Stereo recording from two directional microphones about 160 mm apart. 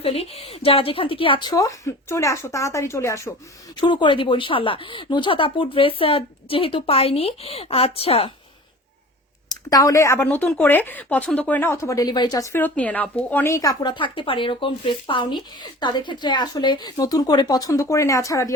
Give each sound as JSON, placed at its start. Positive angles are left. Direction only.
{"t": 0.0, "sound": "a woman's voice", "side_deg": 40}
{"t": 3.8, "sound": "speech", "side_deg": 30}
{"t": 9.5, "sound": "a woman's voice", "side_deg": 25}